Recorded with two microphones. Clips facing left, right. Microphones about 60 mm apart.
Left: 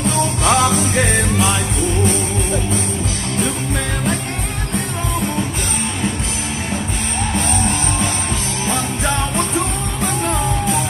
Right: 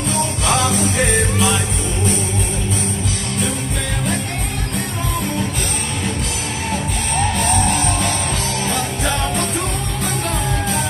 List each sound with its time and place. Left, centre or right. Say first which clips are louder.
0.1 s music: left 2 dB; left